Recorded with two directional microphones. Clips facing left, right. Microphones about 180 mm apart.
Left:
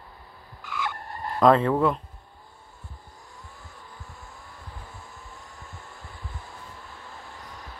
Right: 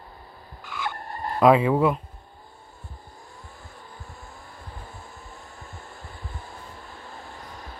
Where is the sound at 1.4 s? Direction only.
5° right (ahead or behind).